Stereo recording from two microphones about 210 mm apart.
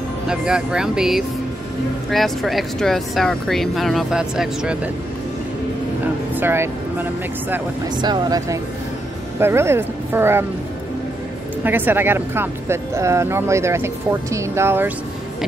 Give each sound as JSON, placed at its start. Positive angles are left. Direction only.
{"t": 0.3, "sound": "speech", "side_deg": -5}
{"t": 6.3, "sound": "speech", "side_deg": -10}
{"t": 8.0, "sound": "speech", "side_deg": -20}
{"t": 11.6, "sound": "speech", "side_deg": -10}